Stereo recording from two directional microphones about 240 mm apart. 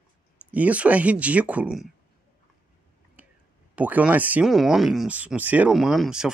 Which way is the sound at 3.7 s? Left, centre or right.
Centre.